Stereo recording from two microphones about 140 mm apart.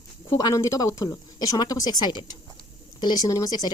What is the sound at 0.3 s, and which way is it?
Speech, 25° left (ahead or behind).